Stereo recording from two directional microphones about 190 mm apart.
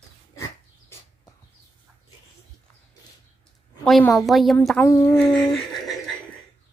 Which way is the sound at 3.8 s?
5° left (ahead or behind).